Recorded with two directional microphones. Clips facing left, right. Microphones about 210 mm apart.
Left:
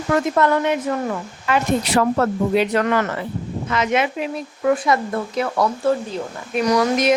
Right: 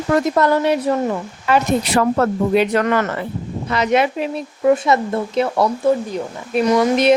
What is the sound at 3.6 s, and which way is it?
Speech, 35° right (ahead or behind).